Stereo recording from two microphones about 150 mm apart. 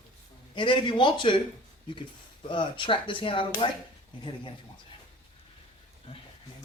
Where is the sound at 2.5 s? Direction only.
35° left (ahead or behind).